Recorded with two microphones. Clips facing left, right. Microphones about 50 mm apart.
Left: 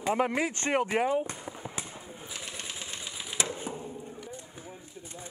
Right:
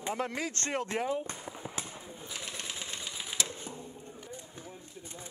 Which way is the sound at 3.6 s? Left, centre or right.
Centre.